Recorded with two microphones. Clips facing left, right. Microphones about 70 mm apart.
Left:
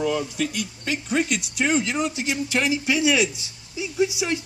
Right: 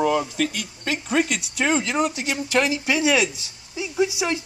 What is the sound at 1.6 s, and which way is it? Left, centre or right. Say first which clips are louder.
Speech: right 2 dB; right.